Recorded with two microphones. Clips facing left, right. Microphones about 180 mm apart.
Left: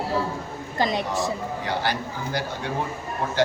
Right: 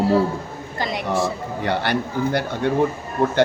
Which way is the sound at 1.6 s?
60° right (ahead or behind).